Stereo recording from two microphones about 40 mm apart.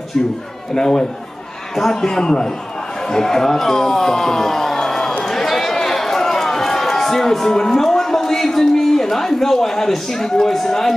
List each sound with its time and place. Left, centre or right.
0.7 s a man's voice: centre